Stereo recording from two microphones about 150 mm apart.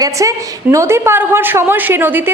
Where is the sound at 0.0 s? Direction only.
20° right (ahead or behind).